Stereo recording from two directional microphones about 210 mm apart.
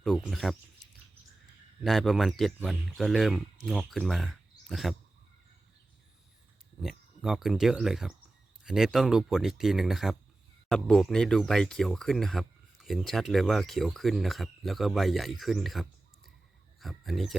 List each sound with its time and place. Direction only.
0.0 s speech: centre (ahead or behind)
1.8 s speech: centre (ahead or behind)
6.8 s speech: centre (ahead or behind)